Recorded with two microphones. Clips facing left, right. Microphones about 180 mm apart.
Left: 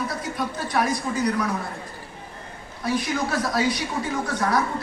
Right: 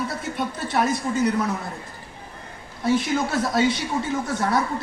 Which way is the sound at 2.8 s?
25° right (ahead or behind).